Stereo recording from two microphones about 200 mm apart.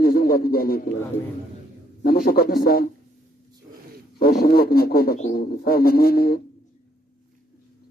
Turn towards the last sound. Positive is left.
turn(degrees=50)  # may be behind; listen again after turning